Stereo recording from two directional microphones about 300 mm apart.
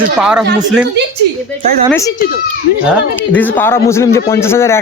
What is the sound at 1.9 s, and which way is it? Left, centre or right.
Speech, centre.